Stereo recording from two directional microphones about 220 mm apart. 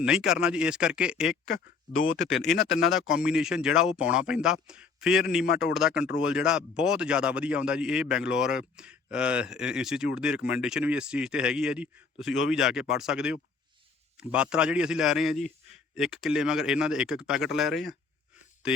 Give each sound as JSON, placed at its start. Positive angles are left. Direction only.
{"t": 0.0, "sound": "a man's voice", "side_deg": -5}
{"t": 1.5, "sound": "speech", "side_deg": 65}
{"t": 2.1, "sound": "a man's voice", "side_deg": 0}